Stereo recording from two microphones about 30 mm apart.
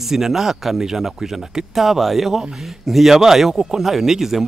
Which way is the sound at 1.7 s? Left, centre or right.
Centre.